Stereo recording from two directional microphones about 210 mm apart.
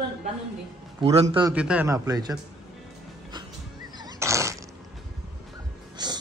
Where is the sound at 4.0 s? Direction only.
15° right (ahead or behind).